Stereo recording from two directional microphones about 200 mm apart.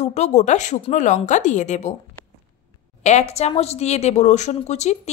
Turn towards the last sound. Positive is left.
turn(degrees=35)  # may be behind; listen again after turning